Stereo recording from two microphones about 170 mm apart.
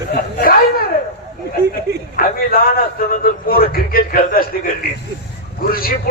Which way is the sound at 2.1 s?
60° left (ahead or behind).